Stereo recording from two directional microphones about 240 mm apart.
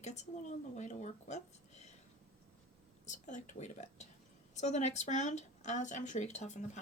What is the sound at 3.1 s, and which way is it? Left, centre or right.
Speech, left.